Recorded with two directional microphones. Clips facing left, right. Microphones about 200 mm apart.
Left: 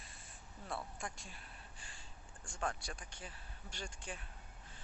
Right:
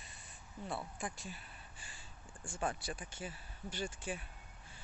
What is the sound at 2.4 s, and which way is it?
Speech, 5° right (ahead or behind).